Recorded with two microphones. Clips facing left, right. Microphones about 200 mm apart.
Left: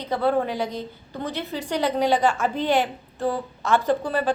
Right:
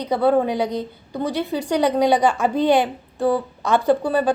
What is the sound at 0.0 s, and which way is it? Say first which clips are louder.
Speech: right 5 dB; 15° right (ahead or behind).